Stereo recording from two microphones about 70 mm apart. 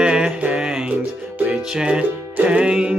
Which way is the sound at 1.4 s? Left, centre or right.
Centre.